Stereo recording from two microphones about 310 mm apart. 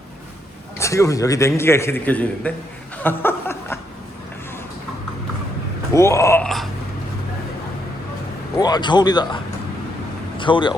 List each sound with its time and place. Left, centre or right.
0.8 s a man's voice: centre
3.0 s a sound: centre
5.9 s a man's voice: centre
8.5 s a man's voice: centre